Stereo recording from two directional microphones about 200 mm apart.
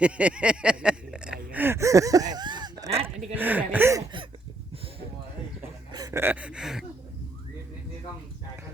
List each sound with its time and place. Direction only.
0.0 s speech: 5° right (ahead or behind)
1.5 s a sound: 10° right (ahead or behind); by 3.3 s 30° right (ahead or behind)
3.3 s speech: 10° right (ahead or behind)
5.9 s gasp: 20° right (ahead or behind); by 6.8 s centre (ahead or behind)